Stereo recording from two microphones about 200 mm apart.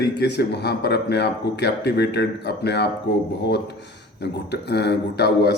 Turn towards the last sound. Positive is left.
turn(degrees=55)  # may be behind; listen again after turning